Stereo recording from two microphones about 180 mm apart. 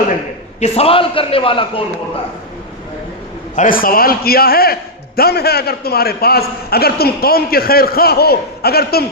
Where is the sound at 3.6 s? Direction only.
50° left (ahead or behind).